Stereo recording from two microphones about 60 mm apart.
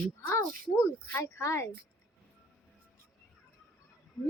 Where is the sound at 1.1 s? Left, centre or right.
Left.